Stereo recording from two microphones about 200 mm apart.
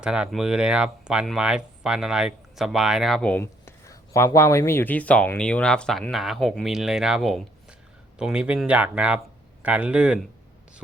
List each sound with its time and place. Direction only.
0.0 s speech: 5° right (ahead or behind)